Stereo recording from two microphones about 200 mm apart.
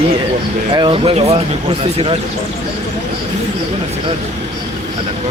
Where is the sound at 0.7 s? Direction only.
25° right (ahead or behind).